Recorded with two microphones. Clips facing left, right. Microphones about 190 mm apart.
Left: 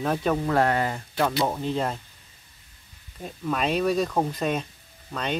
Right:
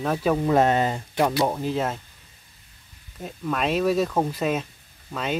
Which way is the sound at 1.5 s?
5° right (ahead or behind).